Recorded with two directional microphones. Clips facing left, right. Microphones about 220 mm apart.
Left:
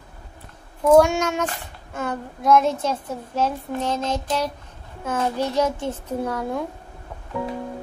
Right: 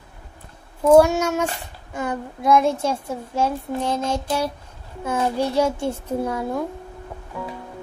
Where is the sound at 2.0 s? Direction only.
15° right (ahead or behind).